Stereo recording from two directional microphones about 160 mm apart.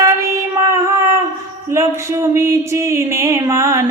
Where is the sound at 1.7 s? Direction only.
15° right (ahead or behind).